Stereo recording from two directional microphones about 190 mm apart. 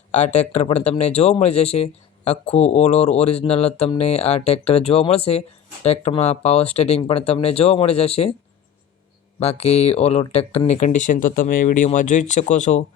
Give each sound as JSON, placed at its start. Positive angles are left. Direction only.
{"t": 0.1, "sound": "speech", "side_deg": 35}
{"t": 9.4, "sound": "speech", "side_deg": 35}